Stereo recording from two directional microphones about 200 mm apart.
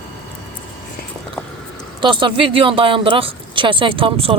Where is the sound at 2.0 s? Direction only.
25° right (ahead or behind).